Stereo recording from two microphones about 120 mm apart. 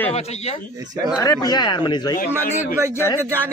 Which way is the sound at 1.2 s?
30° left (ahead or behind).